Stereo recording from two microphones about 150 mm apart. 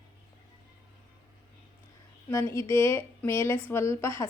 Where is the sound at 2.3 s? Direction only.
15° left (ahead or behind).